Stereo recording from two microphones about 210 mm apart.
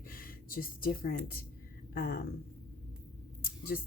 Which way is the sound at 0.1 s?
45° left (ahead or behind).